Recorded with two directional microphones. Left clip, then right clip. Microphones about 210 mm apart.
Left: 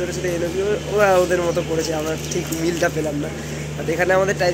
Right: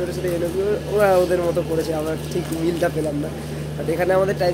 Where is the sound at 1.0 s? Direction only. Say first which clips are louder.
Left 1 dB; centre (ahead or behind).